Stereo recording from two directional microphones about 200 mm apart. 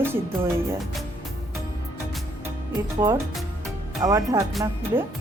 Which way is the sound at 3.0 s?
20° right (ahead or behind).